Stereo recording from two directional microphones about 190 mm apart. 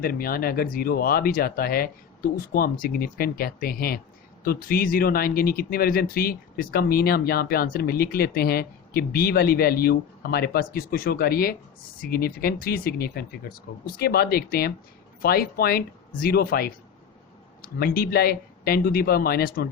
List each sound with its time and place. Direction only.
0.0 s speech: 50° left (ahead or behind)